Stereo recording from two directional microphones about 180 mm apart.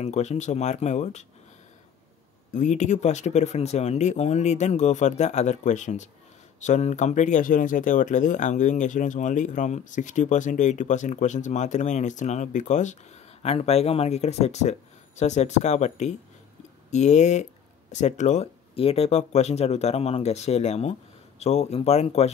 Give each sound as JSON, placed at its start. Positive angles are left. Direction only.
{"t": 0.0, "sound": "speech", "side_deg": 40}
{"t": 2.5, "sound": "speech", "side_deg": 40}